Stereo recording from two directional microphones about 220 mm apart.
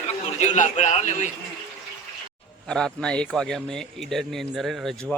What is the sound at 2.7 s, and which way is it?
Speech, centre (ahead or behind).